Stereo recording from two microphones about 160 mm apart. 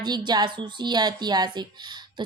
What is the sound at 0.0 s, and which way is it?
A woman's voice, 25° right (ahead or behind).